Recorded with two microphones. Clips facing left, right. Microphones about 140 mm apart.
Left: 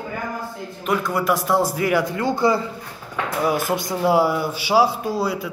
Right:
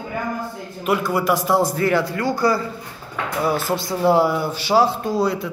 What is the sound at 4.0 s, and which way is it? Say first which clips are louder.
Speech: right 2 dB; 5° left (ahead or behind).